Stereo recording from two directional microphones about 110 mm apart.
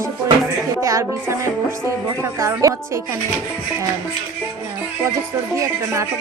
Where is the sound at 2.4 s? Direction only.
30° right (ahead or behind).